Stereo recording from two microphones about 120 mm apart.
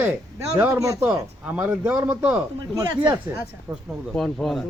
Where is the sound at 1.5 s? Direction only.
10° right (ahead or behind).